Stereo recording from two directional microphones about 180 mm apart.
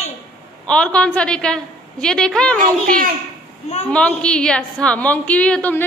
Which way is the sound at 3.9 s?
5° left (ahead or behind).